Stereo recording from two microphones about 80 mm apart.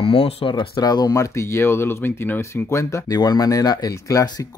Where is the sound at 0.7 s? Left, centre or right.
Left.